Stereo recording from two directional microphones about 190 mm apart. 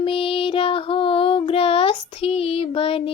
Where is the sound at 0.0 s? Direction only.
30° left (ahead or behind).